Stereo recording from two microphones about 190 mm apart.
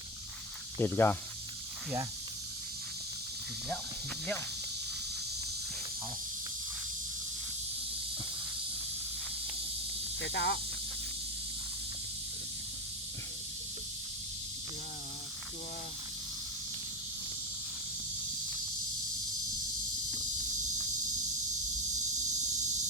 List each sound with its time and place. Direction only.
0.8 s speech: 10° left (ahead or behind)
10.2 s speech: 65° left (ahead or behind)